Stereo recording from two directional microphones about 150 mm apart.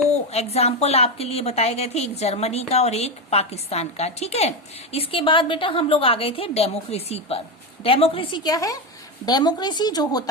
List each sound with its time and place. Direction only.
0.3 s a woman's voice: 45° left (ahead or behind); by 10.2 s 25° left (ahead or behind)